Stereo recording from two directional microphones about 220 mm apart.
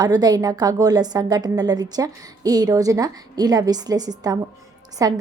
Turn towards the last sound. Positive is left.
turn(degrees=-15)  # may be behind; listen again after turning